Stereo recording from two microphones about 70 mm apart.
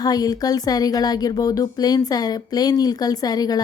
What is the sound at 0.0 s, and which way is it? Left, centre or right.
Speech, left.